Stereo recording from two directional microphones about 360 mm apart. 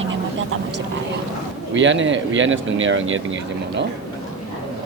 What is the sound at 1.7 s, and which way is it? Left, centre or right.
Speech, right.